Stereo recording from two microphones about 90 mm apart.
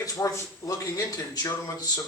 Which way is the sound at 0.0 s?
40° left (ahead or behind).